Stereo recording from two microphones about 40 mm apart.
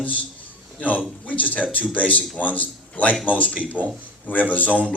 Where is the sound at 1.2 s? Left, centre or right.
Left.